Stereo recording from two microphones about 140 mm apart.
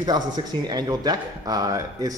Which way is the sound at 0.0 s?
30° right (ahead or behind).